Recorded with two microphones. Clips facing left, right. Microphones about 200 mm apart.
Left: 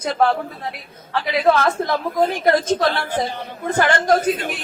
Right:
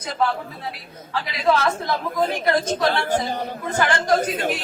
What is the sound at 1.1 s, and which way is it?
A woman's voice, 50° left (ahead or behind).